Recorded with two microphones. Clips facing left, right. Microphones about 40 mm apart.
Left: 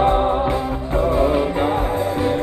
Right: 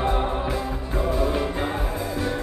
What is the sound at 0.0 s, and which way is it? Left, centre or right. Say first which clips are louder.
Music: left 8 dB; left.